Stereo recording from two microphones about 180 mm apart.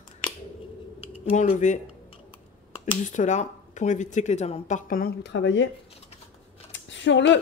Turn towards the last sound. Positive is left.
turn(degrees=85)